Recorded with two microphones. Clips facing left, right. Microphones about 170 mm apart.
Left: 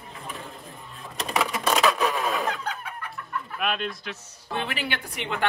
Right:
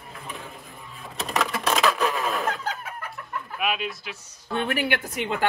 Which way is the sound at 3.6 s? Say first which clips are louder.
Right 1 dB; 5° right (ahead or behind).